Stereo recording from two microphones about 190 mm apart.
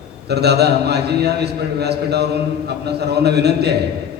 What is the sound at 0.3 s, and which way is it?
A man's voice, 60° right (ahead or behind).